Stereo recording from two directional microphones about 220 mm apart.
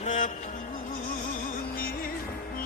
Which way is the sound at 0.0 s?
35° left (ahead or behind).